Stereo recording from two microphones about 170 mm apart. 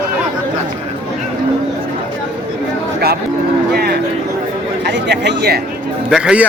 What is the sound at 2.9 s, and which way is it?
Speech, 65° right (ahead or behind).